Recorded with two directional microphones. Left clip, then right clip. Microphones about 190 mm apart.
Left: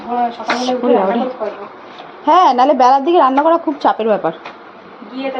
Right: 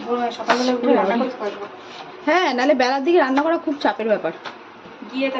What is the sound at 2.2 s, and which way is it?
Speech, 15° right (ahead or behind).